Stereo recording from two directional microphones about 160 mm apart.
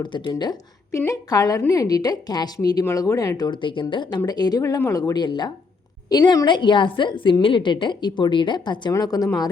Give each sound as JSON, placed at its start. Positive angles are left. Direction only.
{"t": 0.0, "sound": "a woman's voice", "side_deg": 30}
{"t": 0.9, "sound": "a woman's voice", "side_deg": 20}